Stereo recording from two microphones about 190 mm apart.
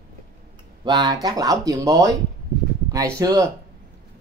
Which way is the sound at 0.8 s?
20° right (ahead or behind).